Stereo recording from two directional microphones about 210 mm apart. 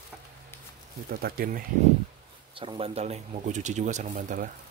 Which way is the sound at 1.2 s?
45° right (ahead or behind).